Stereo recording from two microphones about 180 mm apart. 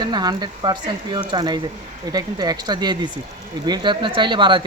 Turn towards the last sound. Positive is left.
turn(degrees=-25)  # may be behind; listen again after turning